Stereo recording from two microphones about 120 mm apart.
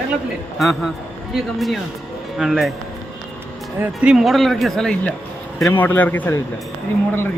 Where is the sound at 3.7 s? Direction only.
10° right (ahead or behind); by 6.3 s 15° left (ahead or behind).